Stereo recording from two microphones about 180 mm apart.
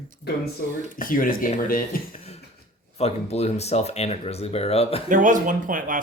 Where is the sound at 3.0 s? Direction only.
35° left (ahead or behind).